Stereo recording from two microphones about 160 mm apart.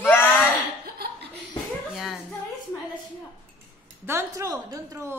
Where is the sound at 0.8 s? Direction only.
80° right.